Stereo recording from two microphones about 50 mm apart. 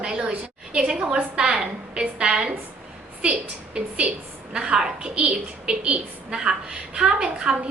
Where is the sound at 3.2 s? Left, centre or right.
Right.